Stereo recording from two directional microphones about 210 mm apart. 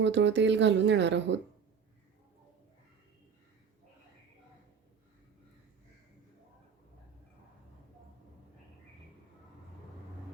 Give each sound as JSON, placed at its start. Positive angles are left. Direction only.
{"t": 0.0, "sound": "speech", "side_deg": -60}